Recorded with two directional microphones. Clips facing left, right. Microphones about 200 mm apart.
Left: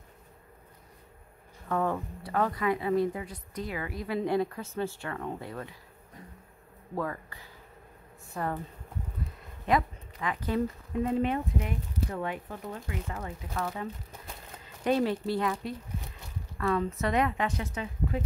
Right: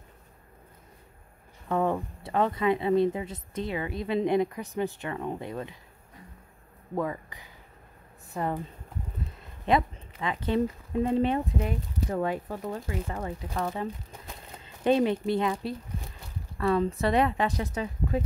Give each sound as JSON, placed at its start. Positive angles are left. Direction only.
{"t": 1.7, "sound": "speech", "side_deg": -20}
{"t": 7.0, "sound": "speech", "side_deg": -15}
{"t": 9.7, "sound": "speech", "side_deg": -25}
{"t": 16.5, "sound": "speech", "side_deg": -30}